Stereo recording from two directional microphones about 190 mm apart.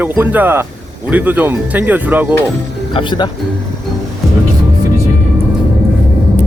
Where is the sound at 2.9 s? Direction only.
25° left (ahead or behind).